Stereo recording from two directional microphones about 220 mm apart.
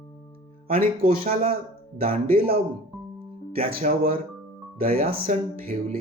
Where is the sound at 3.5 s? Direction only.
40° right (ahead or behind).